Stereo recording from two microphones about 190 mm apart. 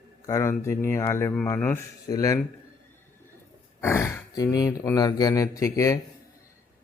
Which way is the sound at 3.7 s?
10° left (ahead or behind).